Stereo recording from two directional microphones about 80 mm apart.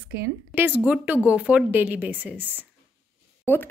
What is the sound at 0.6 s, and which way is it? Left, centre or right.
A woman's voice, right.